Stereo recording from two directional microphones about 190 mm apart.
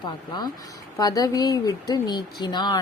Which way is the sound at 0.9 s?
20° left (ahead or behind).